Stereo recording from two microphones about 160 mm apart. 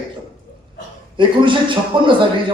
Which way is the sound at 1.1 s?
30° right (ahead or behind).